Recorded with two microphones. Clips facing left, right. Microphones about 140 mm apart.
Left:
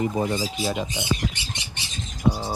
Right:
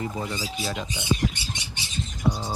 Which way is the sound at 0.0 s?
25° left (ahead or behind).